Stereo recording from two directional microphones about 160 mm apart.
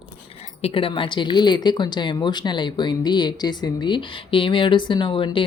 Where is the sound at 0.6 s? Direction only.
35° left (ahead or behind).